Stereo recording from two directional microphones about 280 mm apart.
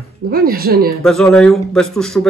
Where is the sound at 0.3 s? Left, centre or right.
Right.